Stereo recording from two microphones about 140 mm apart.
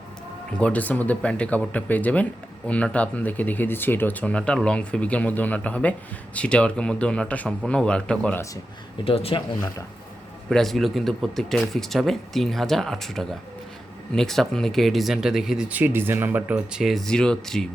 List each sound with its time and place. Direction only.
0.5 s speech: 10° left (ahead or behind)
9.0 s speech: 40° left (ahead or behind)
10.5 s speech: centre (ahead or behind)